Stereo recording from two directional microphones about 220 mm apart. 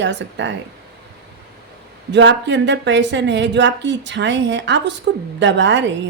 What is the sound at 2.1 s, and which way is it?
A woman's voice, 55° right (ahead or behind).